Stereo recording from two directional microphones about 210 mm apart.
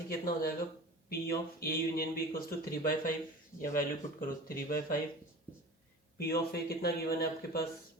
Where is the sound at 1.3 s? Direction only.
45° left (ahead or behind).